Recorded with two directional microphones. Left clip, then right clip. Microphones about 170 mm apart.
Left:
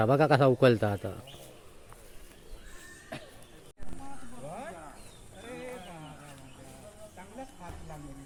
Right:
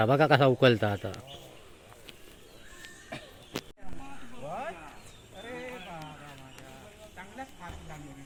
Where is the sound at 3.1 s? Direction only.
Centre (ahead or behind).